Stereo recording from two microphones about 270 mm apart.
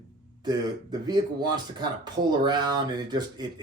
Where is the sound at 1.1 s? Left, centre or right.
Centre.